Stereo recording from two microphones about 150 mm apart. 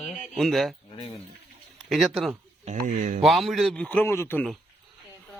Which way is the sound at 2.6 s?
55° right (ahead or behind).